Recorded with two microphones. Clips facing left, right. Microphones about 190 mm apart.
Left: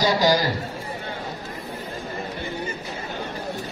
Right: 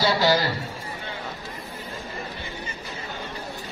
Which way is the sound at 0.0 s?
15° left (ahead or behind).